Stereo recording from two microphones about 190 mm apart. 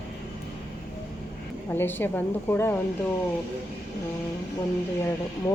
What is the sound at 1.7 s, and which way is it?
A woman's voice, 10° left (ahead or behind).